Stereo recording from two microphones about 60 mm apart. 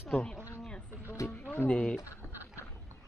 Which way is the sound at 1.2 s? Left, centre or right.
Left.